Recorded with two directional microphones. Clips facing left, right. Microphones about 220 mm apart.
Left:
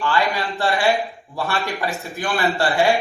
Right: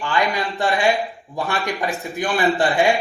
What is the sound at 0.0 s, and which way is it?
A man's voice, 15° right (ahead or behind).